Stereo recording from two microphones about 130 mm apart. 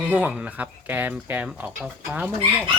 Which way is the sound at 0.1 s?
5° right (ahead or behind).